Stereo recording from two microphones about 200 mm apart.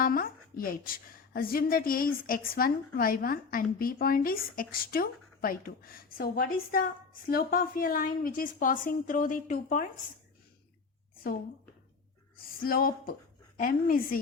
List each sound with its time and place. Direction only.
0.0 s a woman's voice: 45° left (ahead or behind)
12.5 s a woman's voice: 45° left (ahead or behind)